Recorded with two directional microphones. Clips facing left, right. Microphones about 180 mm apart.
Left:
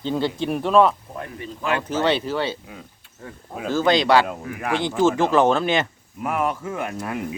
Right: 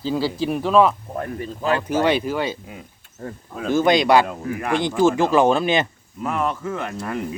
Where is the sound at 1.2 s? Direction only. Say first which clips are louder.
Right 4 dB; 40° right (ahead or behind).